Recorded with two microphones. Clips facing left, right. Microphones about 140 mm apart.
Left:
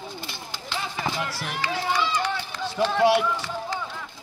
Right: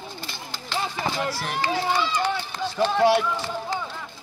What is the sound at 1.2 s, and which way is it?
Speech, 30° right (ahead or behind).